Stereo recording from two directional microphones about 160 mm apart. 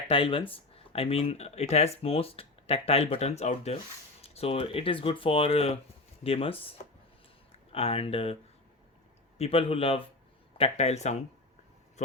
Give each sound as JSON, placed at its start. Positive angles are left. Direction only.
{"t": 0.1, "sound": "speech", "side_deg": 35}
{"t": 9.4, "sound": "speech", "side_deg": 35}